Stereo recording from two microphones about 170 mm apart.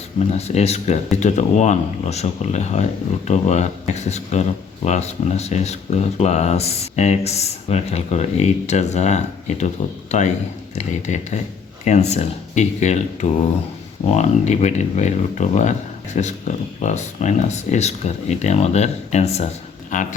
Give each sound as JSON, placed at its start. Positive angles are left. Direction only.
{"t": 0.3, "sound": "speech", "side_deg": 40}